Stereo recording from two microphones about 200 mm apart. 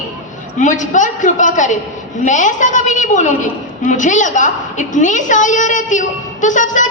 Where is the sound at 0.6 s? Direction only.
40° left (ahead or behind).